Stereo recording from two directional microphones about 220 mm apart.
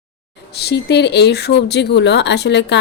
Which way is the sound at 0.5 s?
50° left (ahead or behind).